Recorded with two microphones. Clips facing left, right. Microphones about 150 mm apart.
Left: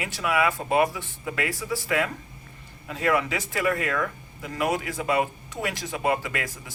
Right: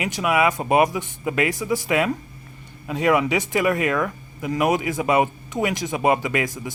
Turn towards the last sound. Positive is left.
turn(degrees=-20)  # may be behind; listen again after turning